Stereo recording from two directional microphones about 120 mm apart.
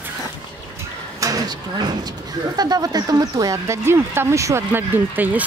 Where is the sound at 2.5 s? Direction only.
35° right (ahead or behind).